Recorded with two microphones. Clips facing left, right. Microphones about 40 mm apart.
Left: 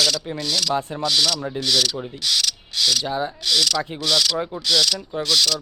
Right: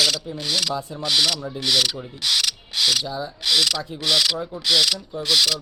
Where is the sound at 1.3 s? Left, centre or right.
Left.